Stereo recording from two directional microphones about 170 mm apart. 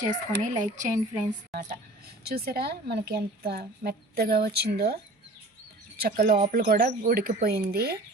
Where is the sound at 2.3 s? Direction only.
65° right (ahead or behind).